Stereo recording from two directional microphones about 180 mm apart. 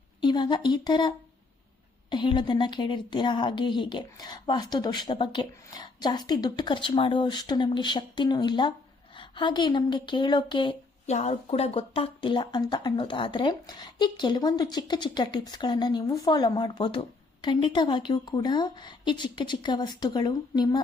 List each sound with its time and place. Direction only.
0.2 s a woman's voice: 25° left (ahead or behind)
11.1 s speech: 40° left (ahead or behind)